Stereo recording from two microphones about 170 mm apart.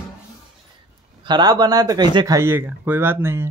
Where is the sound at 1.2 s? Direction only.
25° right (ahead or behind).